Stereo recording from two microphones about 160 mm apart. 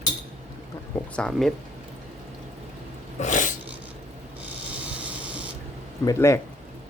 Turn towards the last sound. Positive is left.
turn(degrees=20)  # may be behind; listen again after turning